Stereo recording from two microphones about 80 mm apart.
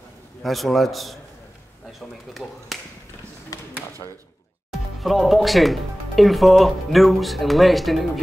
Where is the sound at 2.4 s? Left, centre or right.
Centre.